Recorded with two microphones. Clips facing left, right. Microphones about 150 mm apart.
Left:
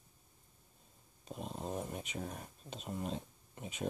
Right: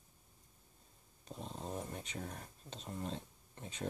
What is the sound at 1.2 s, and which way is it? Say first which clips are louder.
Speech: left 3 dB; 15° left (ahead or behind).